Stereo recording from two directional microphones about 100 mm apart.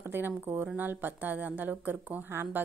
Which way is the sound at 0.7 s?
20° right (ahead or behind).